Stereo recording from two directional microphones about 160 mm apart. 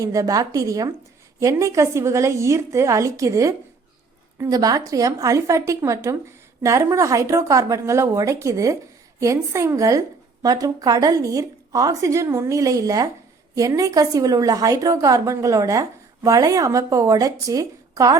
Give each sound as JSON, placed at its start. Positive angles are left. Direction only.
{"t": 0.0, "sound": "a woman's voice", "side_deg": -20}